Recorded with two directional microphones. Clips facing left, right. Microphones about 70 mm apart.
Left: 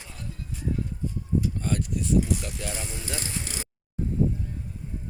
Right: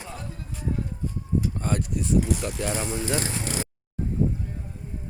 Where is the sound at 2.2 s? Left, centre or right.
Right.